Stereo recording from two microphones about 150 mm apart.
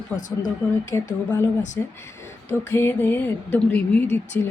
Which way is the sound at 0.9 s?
15° left (ahead or behind).